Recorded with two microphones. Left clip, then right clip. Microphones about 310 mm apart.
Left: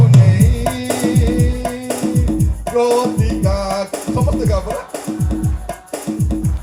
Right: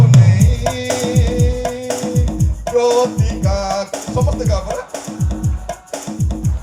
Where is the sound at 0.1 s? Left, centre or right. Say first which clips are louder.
Left 1 dB; left.